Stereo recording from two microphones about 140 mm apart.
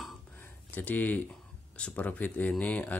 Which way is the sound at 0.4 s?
15° left (ahead or behind).